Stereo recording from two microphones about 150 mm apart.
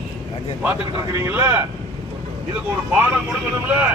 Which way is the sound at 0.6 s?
15° right (ahead or behind).